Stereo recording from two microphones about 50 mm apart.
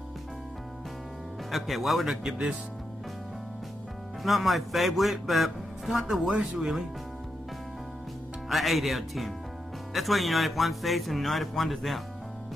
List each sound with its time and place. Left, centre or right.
1.5 s speech: centre
4.2 s speech: centre
6.2 s speech: centre
8.5 s speech: centre